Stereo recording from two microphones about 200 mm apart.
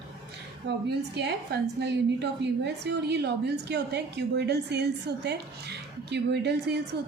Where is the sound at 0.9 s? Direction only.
55° right (ahead or behind).